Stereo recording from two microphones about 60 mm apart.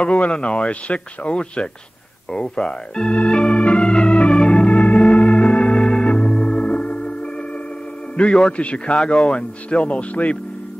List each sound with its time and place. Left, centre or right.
0.0 s speech: centre
2.3 s organ: centre
8.4 s speech: centre